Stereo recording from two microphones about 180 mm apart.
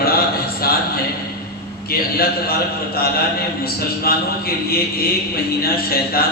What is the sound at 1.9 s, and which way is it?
A man's voice, 55° left (ahead or behind).